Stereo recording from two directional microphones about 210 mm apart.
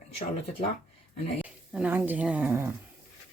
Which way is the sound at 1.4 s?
5° right (ahead or behind).